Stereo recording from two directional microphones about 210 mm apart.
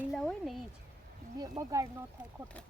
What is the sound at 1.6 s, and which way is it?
Speech, 15° right (ahead or behind).